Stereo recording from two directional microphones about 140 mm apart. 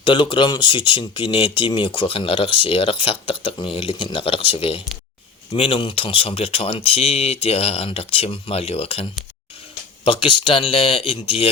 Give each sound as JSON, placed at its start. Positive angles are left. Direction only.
{"t": 0.0, "sound": "speech", "side_deg": 35}